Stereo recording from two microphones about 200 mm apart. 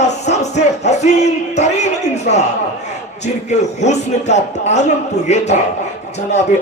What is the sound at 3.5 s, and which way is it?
A man's voice, 35° left (ahead or behind).